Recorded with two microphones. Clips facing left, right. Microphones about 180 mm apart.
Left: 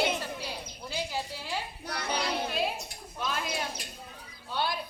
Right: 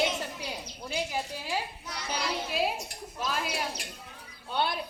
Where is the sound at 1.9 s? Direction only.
60° left (ahead or behind).